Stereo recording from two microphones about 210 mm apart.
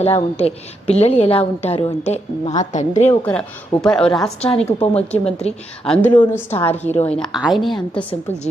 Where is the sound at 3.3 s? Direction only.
5° left (ahead or behind).